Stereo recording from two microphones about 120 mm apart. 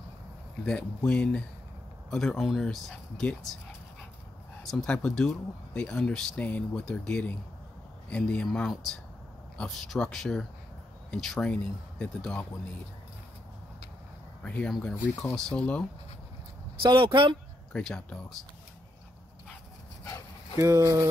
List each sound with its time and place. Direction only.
0.7 s speech: 10° left (ahead or behind)
4.6 s speech: 5° left (ahead or behind)
14.4 s speech: 10° left (ahead or behind)
16.8 s speech: 45° right (ahead or behind)
17.7 s speech: 10° left (ahead or behind)
20.5 s speech: 25° right (ahead or behind)